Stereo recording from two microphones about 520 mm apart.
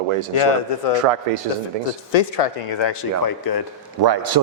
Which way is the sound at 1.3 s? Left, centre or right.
Right.